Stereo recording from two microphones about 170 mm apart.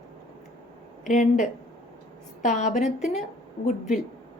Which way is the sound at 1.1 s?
45° left (ahead or behind).